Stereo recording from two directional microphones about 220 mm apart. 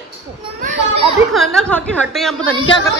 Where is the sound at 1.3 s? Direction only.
Centre (ahead or behind).